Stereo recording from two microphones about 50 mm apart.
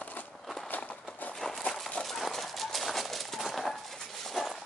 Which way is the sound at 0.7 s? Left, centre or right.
Left.